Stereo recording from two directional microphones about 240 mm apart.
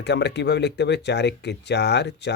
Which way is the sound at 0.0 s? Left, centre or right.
Left.